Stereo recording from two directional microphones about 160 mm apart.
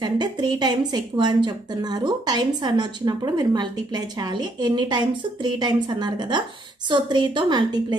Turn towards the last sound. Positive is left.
turn(degrees=-25)  # may be behind; listen again after turning